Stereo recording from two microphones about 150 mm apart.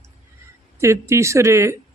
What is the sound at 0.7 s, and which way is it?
Speech, 20° right (ahead or behind).